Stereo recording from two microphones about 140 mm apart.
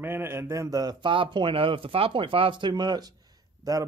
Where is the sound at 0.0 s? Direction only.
15° right (ahead or behind).